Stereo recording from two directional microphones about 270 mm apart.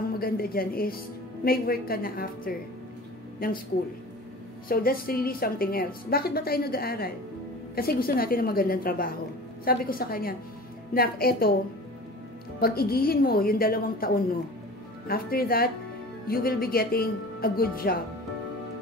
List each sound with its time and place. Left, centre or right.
0.2 s a woman's voice: left
4.6 s a woman's voice: left
12.5 s a woman's voice: left